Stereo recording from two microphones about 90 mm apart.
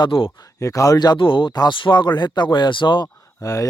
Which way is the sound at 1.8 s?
60° left (ahead or behind).